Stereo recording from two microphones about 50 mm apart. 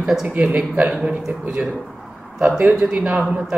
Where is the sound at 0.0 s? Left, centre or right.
Centre.